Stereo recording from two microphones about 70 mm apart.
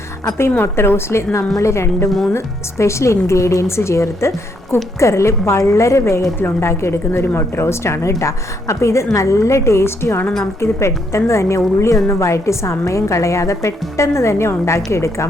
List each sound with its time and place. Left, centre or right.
0.5 s a woman's voice: left
2.0 s speech: centre
2.3 s a woman's voice: left